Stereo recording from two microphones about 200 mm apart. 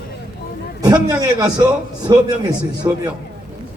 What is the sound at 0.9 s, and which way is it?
A man's voice, 20° right (ahead or behind).